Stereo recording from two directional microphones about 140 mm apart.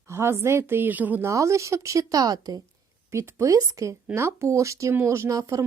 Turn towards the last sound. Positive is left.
turn(degrees=-25)  # may be behind; listen again after turning